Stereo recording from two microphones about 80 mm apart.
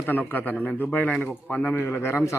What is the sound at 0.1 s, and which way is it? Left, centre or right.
Speech, left.